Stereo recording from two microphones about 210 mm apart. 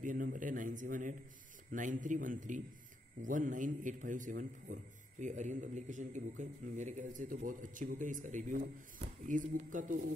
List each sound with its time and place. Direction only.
0.0 s a man's voice: 40° right (ahead or behind)